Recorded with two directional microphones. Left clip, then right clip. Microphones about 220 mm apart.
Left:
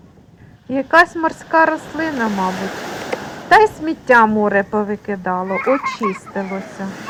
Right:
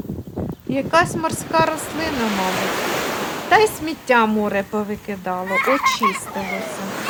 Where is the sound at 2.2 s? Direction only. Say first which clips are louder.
Even; 45° left (ahead or behind).